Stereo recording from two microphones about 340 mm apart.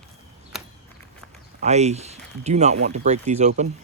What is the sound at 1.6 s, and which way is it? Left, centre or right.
Speech, centre.